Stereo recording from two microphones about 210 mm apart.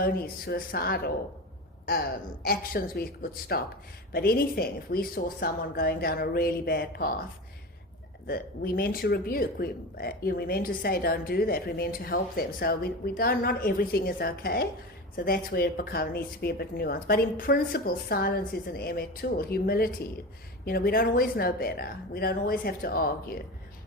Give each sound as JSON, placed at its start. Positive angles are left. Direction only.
{"t": 0.0, "sound": "speech", "side_deg": 50}
{"t": 2.5, "sound": "speech", "side_deg": 45}
{"t": 8.3, "sound": "speech", "side_deg": 45}